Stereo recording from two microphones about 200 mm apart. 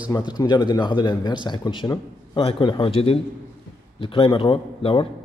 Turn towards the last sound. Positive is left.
turn(degrees=25)  # may be behind; listen again after turning